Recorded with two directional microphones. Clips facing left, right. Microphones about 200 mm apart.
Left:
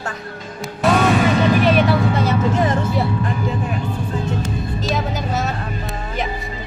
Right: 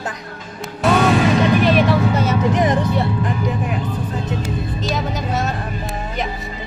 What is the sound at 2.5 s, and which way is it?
Speech, 20° right (ahead or behind).